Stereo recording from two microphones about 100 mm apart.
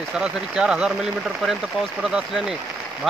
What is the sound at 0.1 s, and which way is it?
Speech, 10° right (ahead or behind).